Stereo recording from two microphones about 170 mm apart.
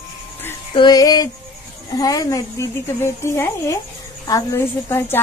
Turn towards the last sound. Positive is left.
turn(degrees=15)  # may be behind; listen again after turning